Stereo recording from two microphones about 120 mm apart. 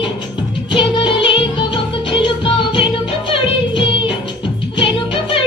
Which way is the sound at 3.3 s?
45° left (ahead or behind).